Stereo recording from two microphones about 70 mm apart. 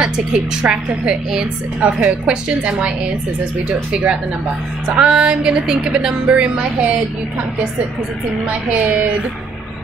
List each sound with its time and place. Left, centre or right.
0.0 s a woman's voice: centre
3.9 s a woman's voice: centre